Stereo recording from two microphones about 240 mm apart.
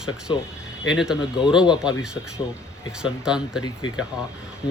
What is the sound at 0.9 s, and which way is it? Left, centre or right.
Speech, centre.